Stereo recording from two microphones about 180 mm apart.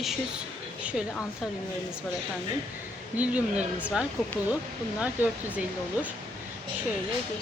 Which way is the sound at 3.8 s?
5° right (ahead or behind).